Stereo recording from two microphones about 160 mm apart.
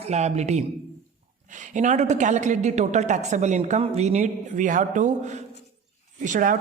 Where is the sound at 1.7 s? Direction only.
50° right (ahead or behind).